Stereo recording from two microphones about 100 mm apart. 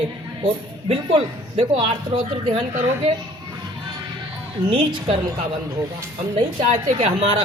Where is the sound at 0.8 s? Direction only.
65° right (ahead or behind).